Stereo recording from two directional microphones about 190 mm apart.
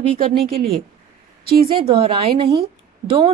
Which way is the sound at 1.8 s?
25° right (ahead or behind).